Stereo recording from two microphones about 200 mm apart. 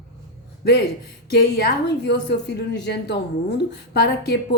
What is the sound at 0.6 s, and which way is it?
A man's voice, 50° left (ahead or behind).